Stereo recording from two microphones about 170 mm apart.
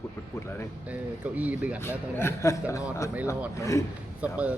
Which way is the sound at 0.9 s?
10° right (ahead or behind).